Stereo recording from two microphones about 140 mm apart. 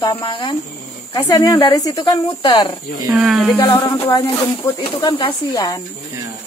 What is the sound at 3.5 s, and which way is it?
Speech, 25° left (ahead or behind).